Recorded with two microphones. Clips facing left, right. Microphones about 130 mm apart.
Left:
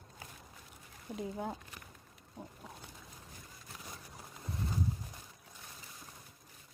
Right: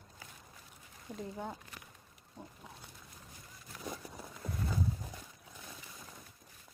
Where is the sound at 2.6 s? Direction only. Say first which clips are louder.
Left 2 dB; centre (ahead or behind).